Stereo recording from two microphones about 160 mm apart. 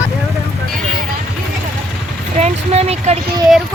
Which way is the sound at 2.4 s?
40° right (ahead or behind).